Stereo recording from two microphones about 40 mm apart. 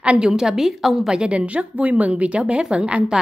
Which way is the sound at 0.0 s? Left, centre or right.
Right.